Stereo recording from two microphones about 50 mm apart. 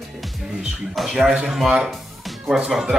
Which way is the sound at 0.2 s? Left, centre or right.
Centre.